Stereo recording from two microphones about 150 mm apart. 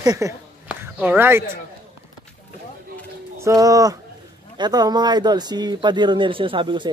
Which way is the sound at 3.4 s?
25° right (ahead or behind).